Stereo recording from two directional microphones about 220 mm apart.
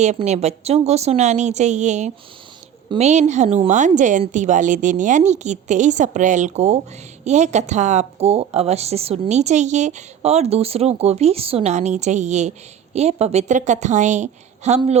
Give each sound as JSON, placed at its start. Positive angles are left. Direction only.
{"t": 0.0, "sound": "a woman's voice", "side_deg": -30}